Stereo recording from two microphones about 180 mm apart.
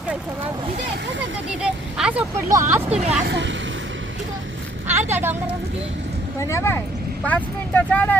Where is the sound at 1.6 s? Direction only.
5° right (ahead or behind).